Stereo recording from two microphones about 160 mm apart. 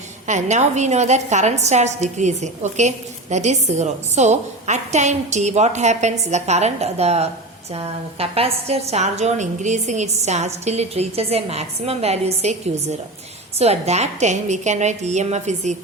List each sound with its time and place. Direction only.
0.3 s a woman's voice: 45° right (ahead or behind)